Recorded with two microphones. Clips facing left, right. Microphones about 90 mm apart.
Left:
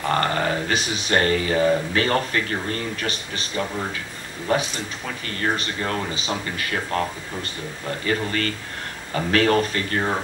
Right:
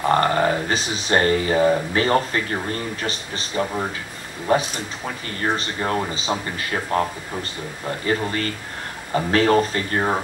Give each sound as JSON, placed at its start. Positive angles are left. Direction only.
{"t": 0.1, "sound": "speech", "side_deg": -25}